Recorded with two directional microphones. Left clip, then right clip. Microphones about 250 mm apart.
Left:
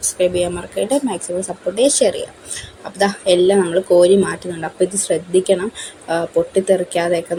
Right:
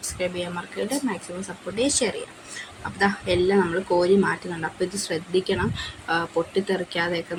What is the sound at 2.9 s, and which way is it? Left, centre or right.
A woman's voice, centre.